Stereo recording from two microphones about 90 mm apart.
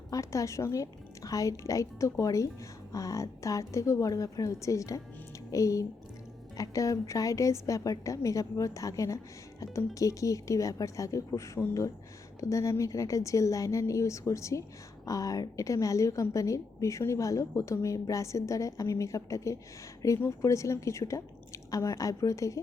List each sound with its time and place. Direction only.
0.1 s a woman's voice: 35° left (ahead or behind)